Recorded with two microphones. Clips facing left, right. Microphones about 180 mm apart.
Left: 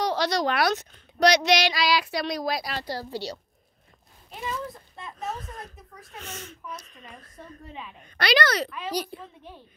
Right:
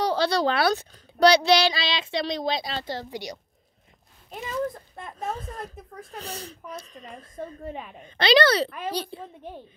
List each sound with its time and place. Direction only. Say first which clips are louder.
0.0 s a child's voice: right 2 dB; 30° right (ahead or behind); by 3.3 s 15° right (ahead or behind)
4.3 s speech: right 4 dB; 50° right (ahead or behind)
5.4 s speech: right 4 dB; 30° right (ahead or behind)
7.3 s a woman's voice: right 8 dB; 50° right (ahead or behind)
8.0 s a child's voice: right 5 dB; 25° right (ahead or behind)